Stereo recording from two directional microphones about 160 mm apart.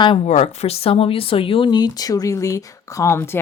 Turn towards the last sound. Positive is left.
turn(degrees=15)  # may be behind; listen again after turning